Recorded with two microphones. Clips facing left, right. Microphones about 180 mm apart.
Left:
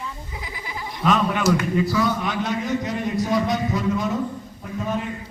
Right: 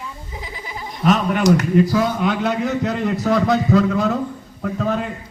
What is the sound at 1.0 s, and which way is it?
Speech, 50° right (ahead or behind).